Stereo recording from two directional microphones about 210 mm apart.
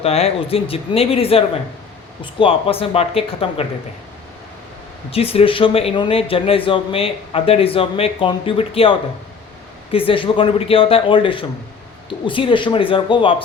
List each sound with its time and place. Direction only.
0.0 s a man's voice: 30° left (ahead or behind)
5.1 s a man's voice: 30° left (ahead or behind)